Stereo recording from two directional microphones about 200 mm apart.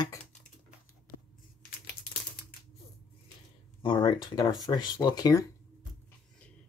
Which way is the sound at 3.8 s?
25° left (ahead or behind).